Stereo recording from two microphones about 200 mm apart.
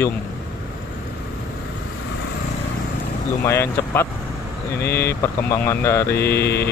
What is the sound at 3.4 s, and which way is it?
Mantra, 10° left (ahead or behind).